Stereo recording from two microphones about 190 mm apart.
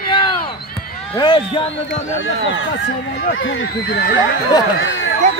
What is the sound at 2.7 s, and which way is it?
Speech, 50° left (ahead or behind).